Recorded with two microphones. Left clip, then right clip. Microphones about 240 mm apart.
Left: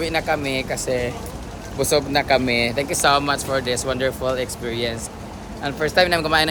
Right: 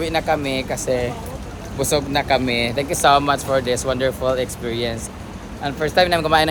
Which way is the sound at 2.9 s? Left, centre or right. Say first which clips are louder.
Right 4 dB; centre.